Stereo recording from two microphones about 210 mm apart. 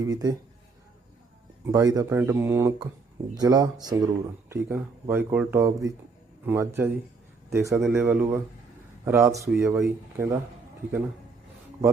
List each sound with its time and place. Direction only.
0.0 s speech: 15° right (ahead or behind)
1.6 s speech: 15° right (ahead or behind)